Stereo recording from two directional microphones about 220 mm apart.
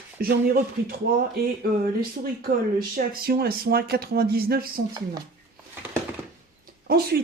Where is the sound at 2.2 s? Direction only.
40° right (ahead or behind).